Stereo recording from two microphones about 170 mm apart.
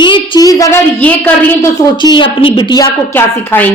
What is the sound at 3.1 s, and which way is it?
Speech, 10° left (ahead or behind).